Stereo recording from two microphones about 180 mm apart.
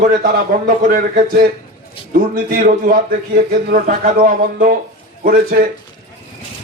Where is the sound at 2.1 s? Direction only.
55° right (ahead or behind).